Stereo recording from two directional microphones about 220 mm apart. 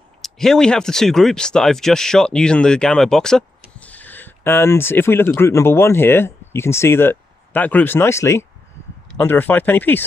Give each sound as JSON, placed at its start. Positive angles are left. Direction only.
{"t": 0.2, "sound": "speech", "side_deg": 0}